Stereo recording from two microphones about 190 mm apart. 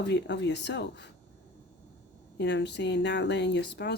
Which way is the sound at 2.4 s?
65° left (ahead or behind).